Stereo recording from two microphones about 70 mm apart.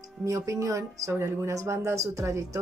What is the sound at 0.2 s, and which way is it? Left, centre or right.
Speech, right.